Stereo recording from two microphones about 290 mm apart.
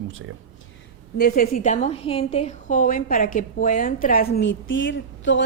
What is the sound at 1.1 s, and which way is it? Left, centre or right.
A woman's voice, left.